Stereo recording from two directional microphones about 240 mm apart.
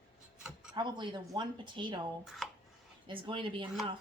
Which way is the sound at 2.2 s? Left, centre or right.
Centre.